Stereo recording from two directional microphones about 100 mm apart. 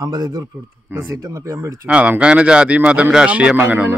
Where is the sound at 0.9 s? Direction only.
30° right (ahead or behind).